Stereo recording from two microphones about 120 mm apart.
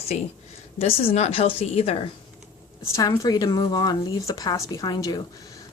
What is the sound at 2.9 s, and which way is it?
Speech, 30° left (ahead or behind).